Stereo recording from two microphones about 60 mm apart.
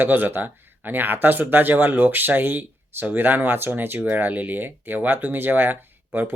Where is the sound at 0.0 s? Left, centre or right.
Right.